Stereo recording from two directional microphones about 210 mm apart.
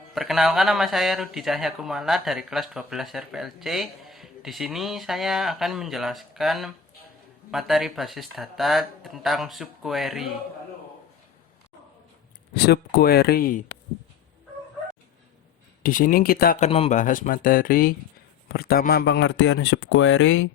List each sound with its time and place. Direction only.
0.1 s speech: centre (ahead or behind)
12.5 s speech: 50° left (ahead or behind)
15.8 s speech: 40° left (ahead or behind); by 20.5 s 60° left (ahead or behind)